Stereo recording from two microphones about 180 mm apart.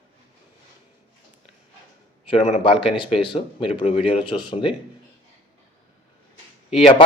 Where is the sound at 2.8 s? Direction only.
30° left (ahead or behind).